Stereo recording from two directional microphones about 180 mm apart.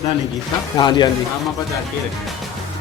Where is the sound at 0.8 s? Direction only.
25° left (ahead or behind).